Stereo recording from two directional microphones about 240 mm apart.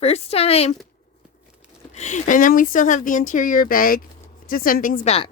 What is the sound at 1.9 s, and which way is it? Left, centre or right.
A woman's voice, left.